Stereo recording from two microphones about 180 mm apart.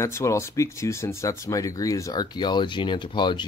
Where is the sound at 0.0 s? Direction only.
15° left (ahead or behind).